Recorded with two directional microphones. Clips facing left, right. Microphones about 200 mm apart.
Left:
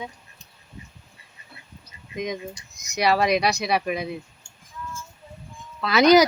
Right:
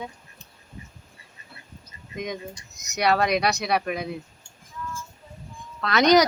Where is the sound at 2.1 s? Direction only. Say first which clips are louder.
Left 2 dB; centre (ahead or behind).